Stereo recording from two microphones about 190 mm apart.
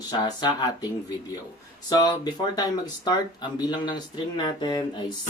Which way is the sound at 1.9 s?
20° left (ahead or behind).